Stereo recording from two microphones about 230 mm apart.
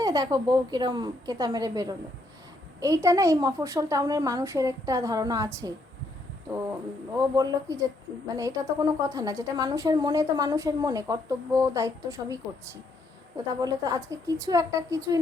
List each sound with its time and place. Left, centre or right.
0.0 s a woman's voice: centre
7.3 s a woman's voice: centre